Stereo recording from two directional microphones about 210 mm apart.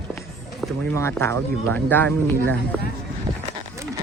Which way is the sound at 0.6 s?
5° left (ahead or behind).